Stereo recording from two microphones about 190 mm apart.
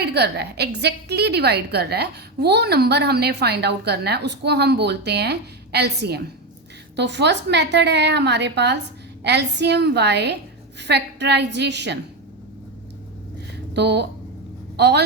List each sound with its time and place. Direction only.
0.0 s a woman's voice: 60° right (ahead or behind)
13.7 s a woman's voice: 60° right (ahead or behind)